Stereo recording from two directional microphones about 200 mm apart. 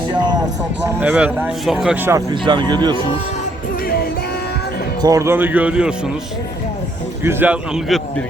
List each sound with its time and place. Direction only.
0.1 s music: 20° right (ahead or behind)
0.9 s speech: 10° right (ahead or behind)
2.0 s speech: 20° right (ahead or behind)
5.0 s speech: 15° right (ahead or behind)
7.3 s a man's voice: 10° right (ahead or behind)